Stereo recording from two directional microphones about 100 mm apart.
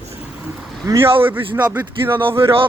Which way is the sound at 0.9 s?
30° right (ahead or behind).